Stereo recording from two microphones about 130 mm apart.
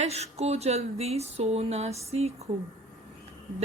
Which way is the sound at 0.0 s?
55° right (ahead or behind).